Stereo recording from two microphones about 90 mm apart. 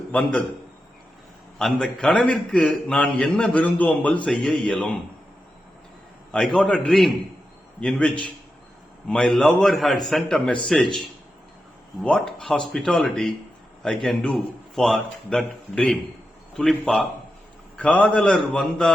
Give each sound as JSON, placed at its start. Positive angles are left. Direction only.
{"t": 0.1, "sound": "a man's voice", "side_deg": 10}
{"t": 1.5, "sound": "a man's voice", "side_deg": 5}
{"t": 4.3, "sound": "a man's voice", "side_deg": 5}
{"t": 6.3, "sound": "a man's voice", "side_deg": 10}
{"t": 12.0, "sound": "a man's voice", "side_deg": 5}